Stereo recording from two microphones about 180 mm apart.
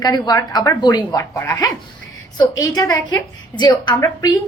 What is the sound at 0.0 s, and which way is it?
A woman's voice, 20° left (ahead or behind).